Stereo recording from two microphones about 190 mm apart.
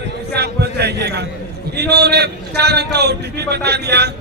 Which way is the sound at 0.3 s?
60° right (ahead or behind).